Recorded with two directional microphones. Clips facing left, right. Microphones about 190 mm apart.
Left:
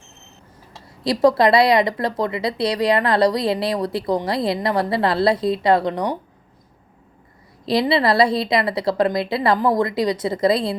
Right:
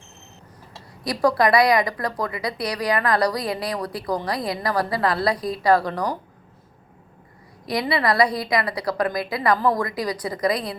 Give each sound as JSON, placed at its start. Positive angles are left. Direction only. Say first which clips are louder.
{"t": 1.0, "sound": "a woman's voice", "louder": "left 4 dB", "side_deg": 25}
{"t": 7.6, "sound": "a woman's voice", "louder": "left 5 dB", "side_deg": 25}